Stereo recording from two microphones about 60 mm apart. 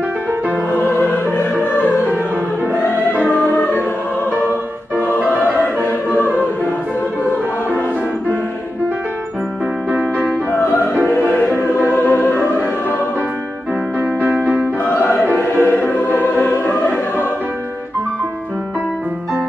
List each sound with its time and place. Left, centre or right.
0.9 s music: left
2.7 s music: left
4.9 s music: left
5.3 s choir: left
10.5 s music: left
11.9 s music: left
13.9 s music: right
14.9 s choir: left
16.6 s music: left